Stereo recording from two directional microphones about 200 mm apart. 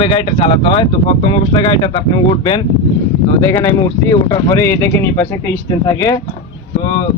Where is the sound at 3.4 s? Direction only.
10° left (ahead or behind).